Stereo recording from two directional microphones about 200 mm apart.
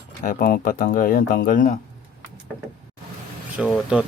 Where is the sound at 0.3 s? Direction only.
45° left (ahead or behind).